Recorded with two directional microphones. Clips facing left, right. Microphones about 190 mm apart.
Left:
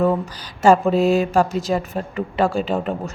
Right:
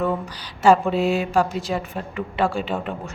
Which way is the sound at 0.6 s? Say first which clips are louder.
Left 2 dB; 45° left (ahead or behind).